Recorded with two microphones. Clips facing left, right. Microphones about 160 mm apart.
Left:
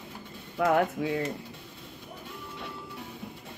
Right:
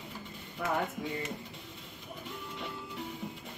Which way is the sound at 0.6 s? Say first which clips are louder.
Left 9 dB; 90° left.